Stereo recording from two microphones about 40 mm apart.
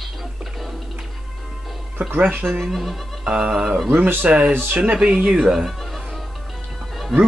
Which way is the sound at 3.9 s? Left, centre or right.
Right.